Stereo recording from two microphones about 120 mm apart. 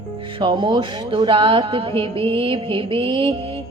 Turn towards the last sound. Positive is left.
turn(degrees=-45)  # may be behind; listen again after turning